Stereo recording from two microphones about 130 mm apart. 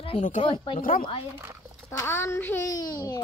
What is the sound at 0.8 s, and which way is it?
Speech, 90° left.